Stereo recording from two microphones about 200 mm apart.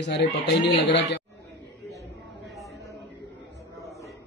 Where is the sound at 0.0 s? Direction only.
60° left (ahead or behind).